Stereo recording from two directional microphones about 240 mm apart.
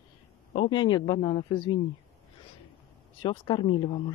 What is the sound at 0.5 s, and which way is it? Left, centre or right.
Speech, left.